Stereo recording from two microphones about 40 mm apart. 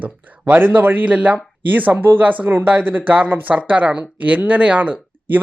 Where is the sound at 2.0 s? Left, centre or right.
Right.